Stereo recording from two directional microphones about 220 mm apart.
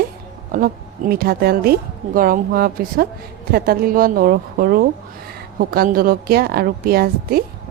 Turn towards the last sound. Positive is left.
turn(degrees=-45)  # may be behind; listen again after turning